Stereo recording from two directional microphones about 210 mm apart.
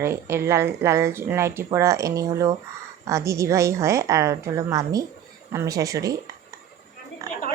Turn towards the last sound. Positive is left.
turn(degrees=-15)  # may be behind; listen again after turning